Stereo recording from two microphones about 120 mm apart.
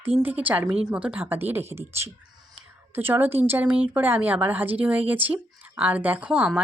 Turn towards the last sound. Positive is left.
turn(degrees=-10)  # may be behind; listen again after turning